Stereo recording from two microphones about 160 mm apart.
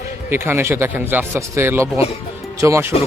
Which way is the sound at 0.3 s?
15° right (ahead or behind).